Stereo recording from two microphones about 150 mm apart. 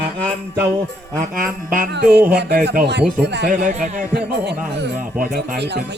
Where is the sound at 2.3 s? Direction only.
80° right.